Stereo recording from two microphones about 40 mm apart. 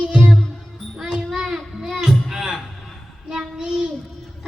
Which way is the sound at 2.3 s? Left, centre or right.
Centre.